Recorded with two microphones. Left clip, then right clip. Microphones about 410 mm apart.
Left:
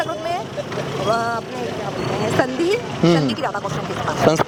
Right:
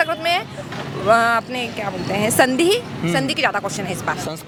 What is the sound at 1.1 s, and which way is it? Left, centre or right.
Speech, right.